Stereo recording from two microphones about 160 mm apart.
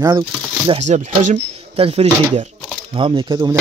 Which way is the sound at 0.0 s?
30° right (ahead or behind).